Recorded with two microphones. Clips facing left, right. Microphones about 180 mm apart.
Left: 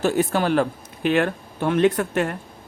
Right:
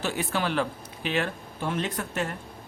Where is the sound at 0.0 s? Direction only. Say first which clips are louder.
Left 8 dB; 45° left (ahead or behind); by 2.3 s 60° left (ahead or behind).